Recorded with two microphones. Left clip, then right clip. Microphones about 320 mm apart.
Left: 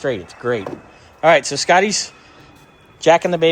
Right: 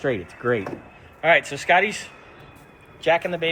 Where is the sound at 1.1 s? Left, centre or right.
Left.